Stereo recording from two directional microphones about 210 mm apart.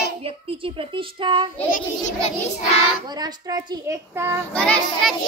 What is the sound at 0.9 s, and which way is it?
Child singing, 20° right (ahead or behind).